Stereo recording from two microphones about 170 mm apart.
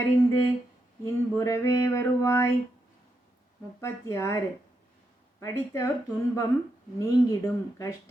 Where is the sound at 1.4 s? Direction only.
15° left (ahead or behind).